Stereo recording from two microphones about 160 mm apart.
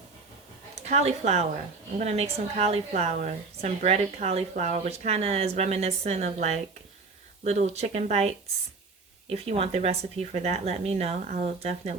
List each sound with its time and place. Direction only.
0.8 s a woman's voice: 45° right (ahead or behind)